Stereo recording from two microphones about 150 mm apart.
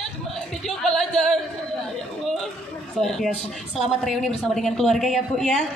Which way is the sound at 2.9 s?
5° left (ahead or behind).